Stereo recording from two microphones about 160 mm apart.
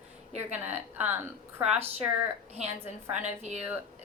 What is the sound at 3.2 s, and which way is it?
Speech, 45° right (ahead or behind).